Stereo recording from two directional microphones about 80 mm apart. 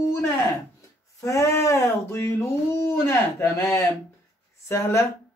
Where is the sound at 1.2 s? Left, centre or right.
Left.